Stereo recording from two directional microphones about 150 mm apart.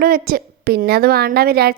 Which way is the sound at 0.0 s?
75° right (ahead or behind).